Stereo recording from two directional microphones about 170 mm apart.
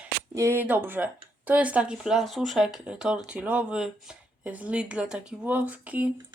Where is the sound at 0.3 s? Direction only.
15° right (ahead or behind).